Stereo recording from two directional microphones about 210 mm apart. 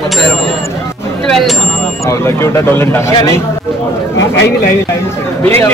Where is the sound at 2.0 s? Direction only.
15° left (ahead or behind).